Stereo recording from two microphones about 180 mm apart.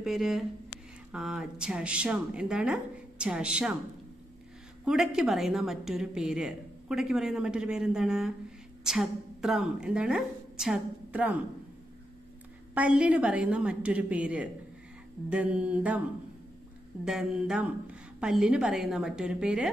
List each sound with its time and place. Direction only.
0.0 s a woman's voice: centre (ahead or behind)
4.8 s a woman's voice: centre (ahead or behind)
12.7 s a woman's voice: 5° right (ahead or behind)
17.0 s a woman's voice: 5° right (ahead or behind)